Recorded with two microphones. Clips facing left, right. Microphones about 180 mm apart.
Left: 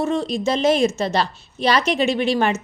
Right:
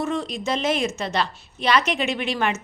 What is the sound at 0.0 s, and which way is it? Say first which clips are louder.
A woman's voice: left 5 dB; 30° left (ahead or behind).